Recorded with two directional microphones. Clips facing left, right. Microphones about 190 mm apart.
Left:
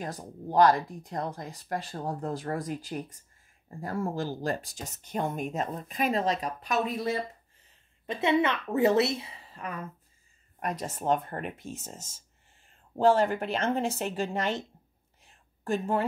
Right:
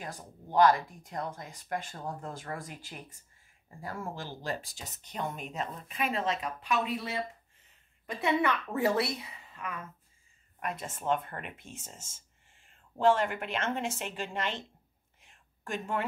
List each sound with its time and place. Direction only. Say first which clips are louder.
0.0 s speech: left 6 dB; 35° left (ahead or behind)
8.1 s a woman's voice: left 3 dB; 25° left (ahead or behind); by 14.6 s 40° left (ahead or behind)
15.1 s a sound: left 2 dB; 35° left (ahead or behind)